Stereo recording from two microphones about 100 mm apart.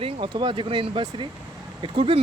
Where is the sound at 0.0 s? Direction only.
65° right (ahead or behind).